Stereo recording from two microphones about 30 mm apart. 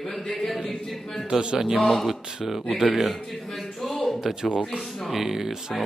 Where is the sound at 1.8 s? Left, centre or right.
Centre.